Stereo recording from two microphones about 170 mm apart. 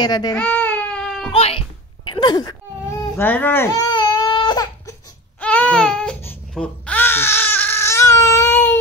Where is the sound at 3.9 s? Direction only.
25° left (ahead or behind).